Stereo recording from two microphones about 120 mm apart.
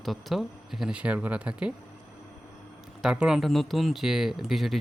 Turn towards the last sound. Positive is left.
turn(degrees=0)  # may be behind; listen again after turning